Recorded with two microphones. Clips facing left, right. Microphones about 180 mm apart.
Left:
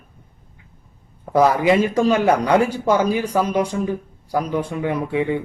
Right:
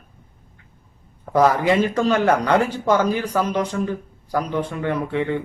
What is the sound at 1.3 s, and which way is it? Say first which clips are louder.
Speech: left 1 dB; 10° left (ahead or behind).